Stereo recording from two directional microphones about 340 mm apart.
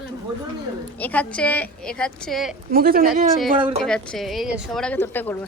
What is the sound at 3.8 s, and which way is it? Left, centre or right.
A woman's voice, centre.